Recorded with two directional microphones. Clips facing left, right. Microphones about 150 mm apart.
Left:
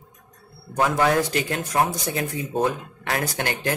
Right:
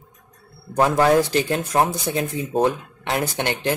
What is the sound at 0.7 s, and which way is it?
Speech, 35° right (ahead or behind).